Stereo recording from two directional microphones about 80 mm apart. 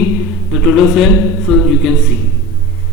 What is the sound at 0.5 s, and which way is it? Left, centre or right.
Speech, centre.